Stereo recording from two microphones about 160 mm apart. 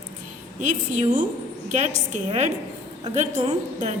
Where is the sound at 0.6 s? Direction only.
50° right (ahead or behind).